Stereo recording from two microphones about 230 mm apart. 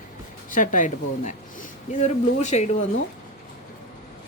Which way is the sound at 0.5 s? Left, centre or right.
Left.